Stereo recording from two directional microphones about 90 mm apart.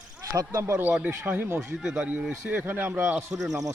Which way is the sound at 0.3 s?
35° right (ahead or behind).